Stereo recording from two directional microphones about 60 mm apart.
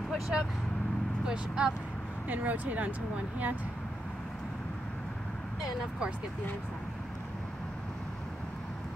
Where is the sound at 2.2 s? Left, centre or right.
Right.